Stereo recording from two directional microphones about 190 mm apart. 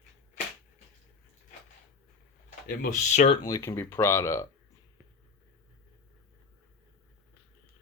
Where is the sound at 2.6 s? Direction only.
45° left (ahead or behind).